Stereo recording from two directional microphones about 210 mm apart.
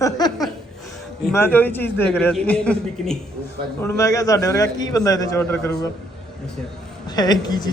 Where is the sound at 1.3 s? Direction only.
10° left (ahead or behind).